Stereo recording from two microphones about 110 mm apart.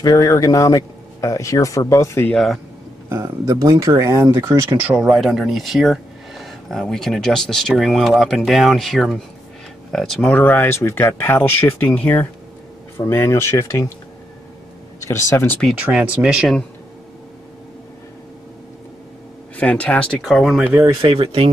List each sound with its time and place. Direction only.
0.0 s speech: 30° left (ahead or behind)
2.3 s speech: centre (ahead or behind)
3.4 s speech: 30° right (ahead or behind)
4.9 s speech: 5° right (ahead or behind)
10.3 s speech: 15° left (ahead or behind)
15.0 s speech: 25° left (ahead or behind)
15.9 s speech: 5° right (ahead or behind)
19.5 s speech: 10° left (ahead or behind)
20.2 s speech: centre (ahead or behind)
20.5 s speech: 15° right (ahead or behind)
21.0 s speech: 60° right (ahead or behind)